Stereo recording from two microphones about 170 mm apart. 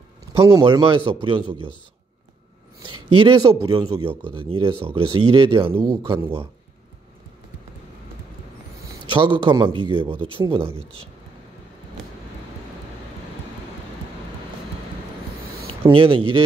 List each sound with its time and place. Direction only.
0.4 s speech: 15° right (ahead or behind)
0.7 s speech: 30° right (ahead or behind)
2.9 s speech: 30° right (ahead or behind)
9.1 s speech: 30° right (ahead or behind)
15.9 s speech: 30° right (ahead or behind)